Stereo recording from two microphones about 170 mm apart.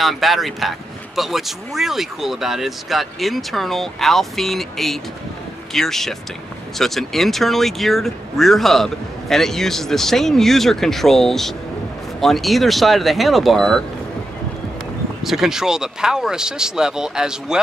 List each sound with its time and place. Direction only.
0.0 s speech: centre (ahead or behind)
15.2 s speech: centre (ahead or behind)